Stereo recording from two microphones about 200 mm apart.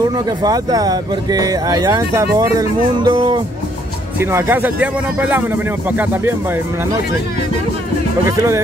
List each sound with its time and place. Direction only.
0.4 s speech: 20° right (ahead or behind)
4.2 s speech: 10° right (ahead or behind)